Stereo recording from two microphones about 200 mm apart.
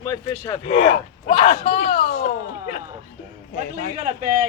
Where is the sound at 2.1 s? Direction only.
50° left (ahead or behind).